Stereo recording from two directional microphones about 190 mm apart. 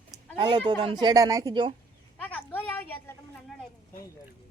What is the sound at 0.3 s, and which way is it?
Speech, 25° right (ahead or behind).